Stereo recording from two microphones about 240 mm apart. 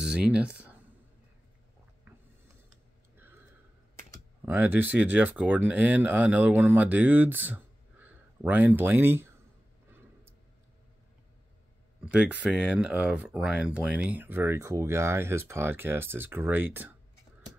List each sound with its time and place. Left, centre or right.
0.0 s speech: centre
4.5 s speech: centre
12.0 s speech: centre